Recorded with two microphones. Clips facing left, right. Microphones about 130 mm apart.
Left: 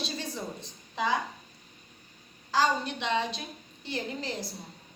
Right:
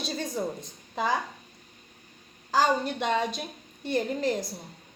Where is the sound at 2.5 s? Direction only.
45° right (ahead or behind).